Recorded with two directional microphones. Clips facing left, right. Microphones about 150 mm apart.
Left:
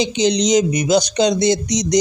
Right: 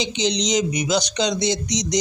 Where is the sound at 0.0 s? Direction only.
50° left (ahead or behind).